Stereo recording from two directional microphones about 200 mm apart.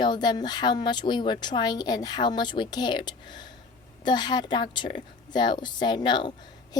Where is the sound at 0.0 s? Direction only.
20° left (ahead or behind).